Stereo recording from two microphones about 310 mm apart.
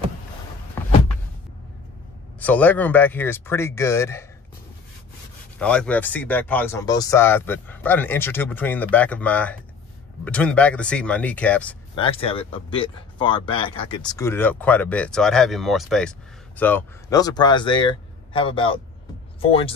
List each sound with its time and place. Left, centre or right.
2.4 s speech: centre
5.6 s speech: centre
11.9 s speech: centre